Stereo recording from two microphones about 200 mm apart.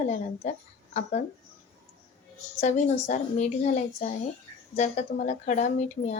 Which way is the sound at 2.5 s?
35° left (ahead or behind).